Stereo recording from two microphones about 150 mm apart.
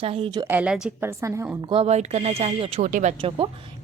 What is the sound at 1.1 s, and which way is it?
Speech, 20° right (ahead or behind).